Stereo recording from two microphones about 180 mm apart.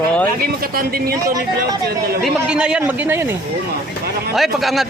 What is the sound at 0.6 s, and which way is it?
Speech, 55° right (ahead or behind).